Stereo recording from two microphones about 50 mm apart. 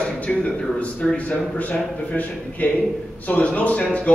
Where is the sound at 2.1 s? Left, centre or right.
Left.